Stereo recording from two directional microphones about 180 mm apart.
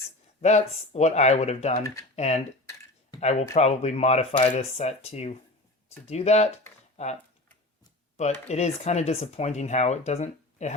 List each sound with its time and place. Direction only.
0.4 s speech: 35° left (ahead or behind)